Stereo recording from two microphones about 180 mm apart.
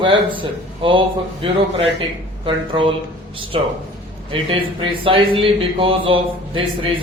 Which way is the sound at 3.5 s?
30° right (ahead or behind).